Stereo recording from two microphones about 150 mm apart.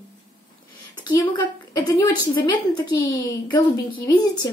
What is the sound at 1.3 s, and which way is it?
Speech, 20° left (ahead or behind).